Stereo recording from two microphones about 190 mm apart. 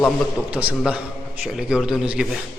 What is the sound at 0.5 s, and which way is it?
A man's voice, 5° right (ahead or behind).